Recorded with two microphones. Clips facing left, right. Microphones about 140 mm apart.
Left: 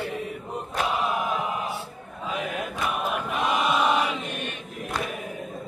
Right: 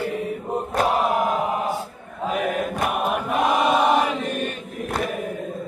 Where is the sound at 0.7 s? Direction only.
40° right (ahead or behind).